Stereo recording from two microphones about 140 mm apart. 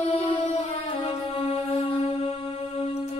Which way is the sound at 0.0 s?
45° left (ahead or behind).